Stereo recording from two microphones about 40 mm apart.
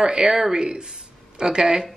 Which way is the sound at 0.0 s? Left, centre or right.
Centre.